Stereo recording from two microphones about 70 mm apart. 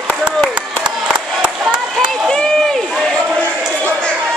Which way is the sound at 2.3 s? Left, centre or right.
Centre.